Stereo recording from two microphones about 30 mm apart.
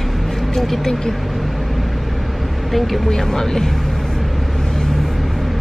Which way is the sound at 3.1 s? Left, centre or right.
Centre.